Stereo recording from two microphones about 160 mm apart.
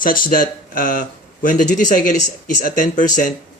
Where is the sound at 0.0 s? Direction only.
60° left (ahead or behind).